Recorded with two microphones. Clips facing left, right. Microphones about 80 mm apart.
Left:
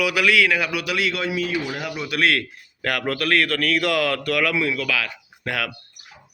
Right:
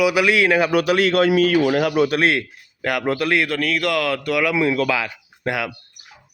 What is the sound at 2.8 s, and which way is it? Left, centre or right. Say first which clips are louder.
A man's voice: right 3 dB; centre.